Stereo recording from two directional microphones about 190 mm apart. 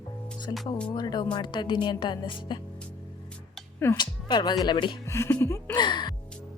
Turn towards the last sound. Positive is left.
turn(degrees=25)  # may be behind; listen again after turning